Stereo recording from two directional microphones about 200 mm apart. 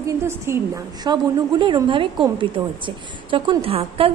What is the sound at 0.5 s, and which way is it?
A woman's voice, 15° right (ahead or behind).